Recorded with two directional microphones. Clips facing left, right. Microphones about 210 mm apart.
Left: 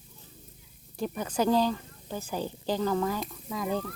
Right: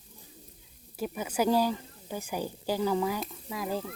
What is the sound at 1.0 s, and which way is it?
A woman's voice, 5° right (ahead or behind).